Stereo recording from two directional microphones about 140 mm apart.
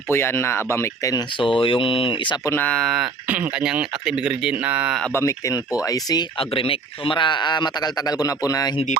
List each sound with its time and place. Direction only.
0.1 s speech: 15° left (ahead or behind)
1.4 s speech: 40° left (ahead or behind)
2.5 s speech: 10° left (ahead or behind); by 4.9 s 10° right (ahead or behind)
5.1 s speech: 20° left (ahead or behind)
6.5 s speech: 40° left (ahead or behind); by 8.7 s 25° left (ahead or behind)